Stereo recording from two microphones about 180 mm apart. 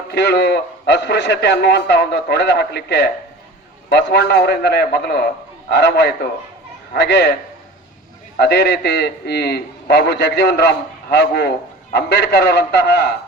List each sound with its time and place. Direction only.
0.1 s a man's voice: 65° left (ahead or behind)
8.4 s a man's voice: 65° left (ahead or behind)